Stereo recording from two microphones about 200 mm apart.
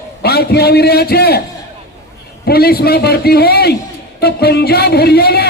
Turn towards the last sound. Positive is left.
turn(degrees=55)  # may be behind; listen again after turning